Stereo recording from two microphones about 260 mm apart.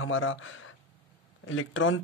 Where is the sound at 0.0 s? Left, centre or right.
Left.